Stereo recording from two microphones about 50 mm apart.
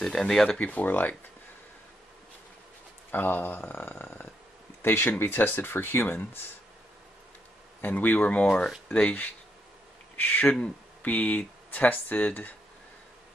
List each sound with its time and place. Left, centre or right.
0.0 s speech: centre
0.6 s speech: left
3.1 s speech: left
7.8 s speech: left
10.4 s speech: left